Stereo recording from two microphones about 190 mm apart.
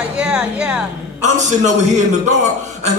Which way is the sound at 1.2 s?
40° right (ahead or behind).